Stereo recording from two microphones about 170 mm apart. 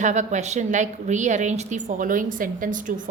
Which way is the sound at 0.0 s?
45° right (ahead or behind).